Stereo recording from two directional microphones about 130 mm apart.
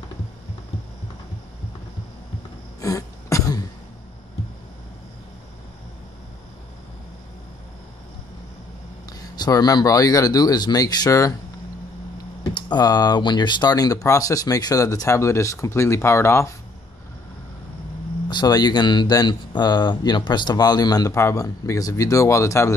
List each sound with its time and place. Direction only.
2.8 s throat clearing: 25° left (ahead or behind)
9.2 s speech: 30° left (ahead or behind)
12.5 s speech: 35° left (ahead or behind)
18.3 s speech: 30° left (ahead or behind)